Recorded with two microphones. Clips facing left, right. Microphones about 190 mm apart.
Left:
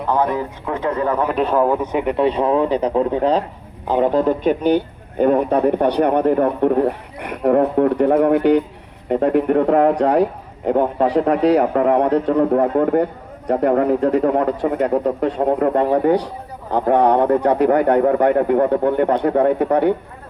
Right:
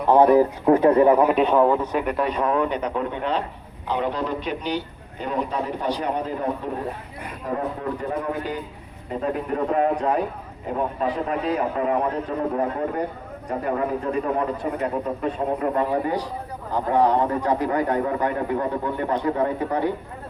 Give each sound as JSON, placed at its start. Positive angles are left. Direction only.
{"t": 0.3, "sound": "speech", "side_deg": -35}
{"t": 1.0, "sound": "a man's voice", "side_deg": -15}
{"t": 1.3, "sound": "speech", "side_deg": 0}
{"t": 1.8, "sound": "a man's voice", "side_deg": 20}